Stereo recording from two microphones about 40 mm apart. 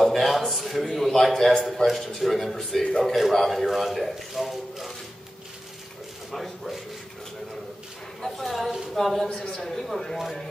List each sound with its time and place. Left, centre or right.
0.0 s a sound: centre
0.4 s a man's voice: centre
6.3 s a man's voice: centre
8.2 s a man's voice: centre
9.3 s a man's voice: centre